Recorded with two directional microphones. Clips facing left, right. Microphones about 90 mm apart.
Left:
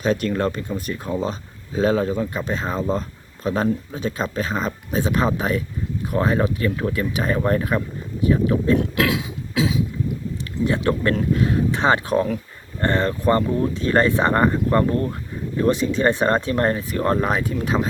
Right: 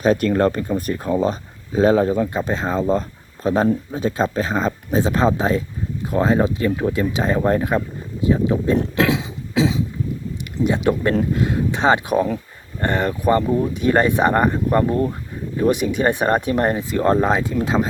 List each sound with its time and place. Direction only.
0.0 s speech: 40° right (ahead or behind); by 8.7 s 20° right (ahead or behind)
8.8 s a sound: 30° right (ahead or behind)
10.6 s speech: 15° right (ahead or behind)